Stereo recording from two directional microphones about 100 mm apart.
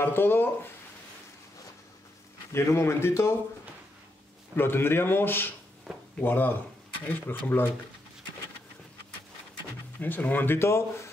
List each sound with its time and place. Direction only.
0.0 s speech: 20° left (ahead or behind)
2.5 s speech: 25° left (ahead or behind)
4.6 s speech: 25° left (ahead or behind)
9.9 s speech: 20° left (ahead or behind)